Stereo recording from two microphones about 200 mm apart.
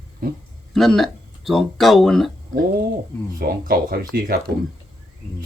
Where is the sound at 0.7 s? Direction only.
Centre (ahead or behind).